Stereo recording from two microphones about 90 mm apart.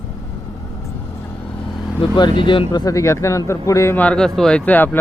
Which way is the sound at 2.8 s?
35° left (ahead or behind).